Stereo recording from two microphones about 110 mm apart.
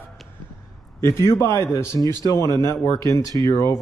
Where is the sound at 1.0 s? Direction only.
25° left (ahead or behind).